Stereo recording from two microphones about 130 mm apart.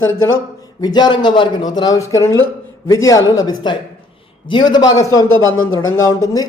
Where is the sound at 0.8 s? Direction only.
35° left (ahead or behind).